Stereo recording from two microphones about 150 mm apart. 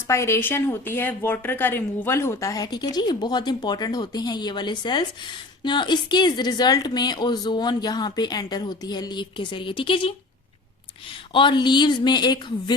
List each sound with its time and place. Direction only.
0.1 s speech: 20° left (ahead or behind); by 10.2 s 35° left (ahead or behind)
11.3 s speech: 30° left (ahead or behind)